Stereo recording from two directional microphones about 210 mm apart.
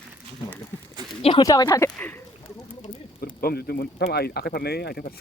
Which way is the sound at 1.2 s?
20° left (ahead or behind).